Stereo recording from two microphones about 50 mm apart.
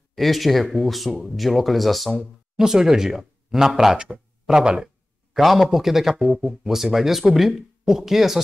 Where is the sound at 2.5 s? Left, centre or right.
Centre.